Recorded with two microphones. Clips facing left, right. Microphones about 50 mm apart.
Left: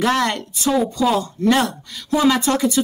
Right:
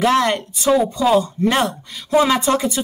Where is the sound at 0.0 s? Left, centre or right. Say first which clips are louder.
Right 3 dB; centre.